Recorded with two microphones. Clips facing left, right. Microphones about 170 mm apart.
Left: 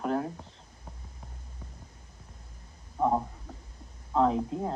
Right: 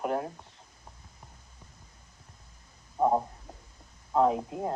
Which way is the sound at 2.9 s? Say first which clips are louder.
Right 2 dB; 20° right (ahead or behind).